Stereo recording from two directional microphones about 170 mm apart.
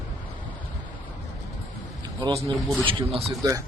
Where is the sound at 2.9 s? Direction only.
35° right (ahead or behind).